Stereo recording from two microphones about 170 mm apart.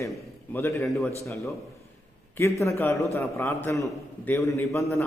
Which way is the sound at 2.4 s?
15° left (ahead or behind).